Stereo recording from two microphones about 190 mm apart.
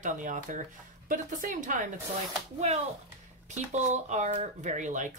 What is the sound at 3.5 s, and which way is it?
Speech, 40° right (ahead or behind).